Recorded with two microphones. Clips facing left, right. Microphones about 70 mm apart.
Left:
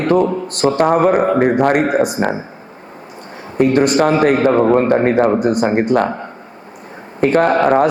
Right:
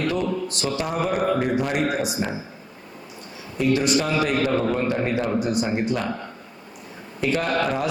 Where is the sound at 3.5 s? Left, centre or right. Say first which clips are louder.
Left 8 dB; left.